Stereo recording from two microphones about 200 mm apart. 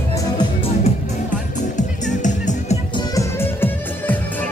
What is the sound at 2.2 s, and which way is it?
Music, 40° left (ahead or behind).